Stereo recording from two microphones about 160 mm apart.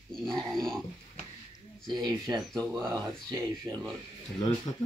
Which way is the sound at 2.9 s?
25° right (ahead or behind).